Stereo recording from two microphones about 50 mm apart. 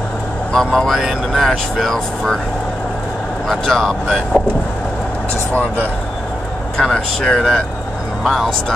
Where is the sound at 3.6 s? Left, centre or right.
Centre.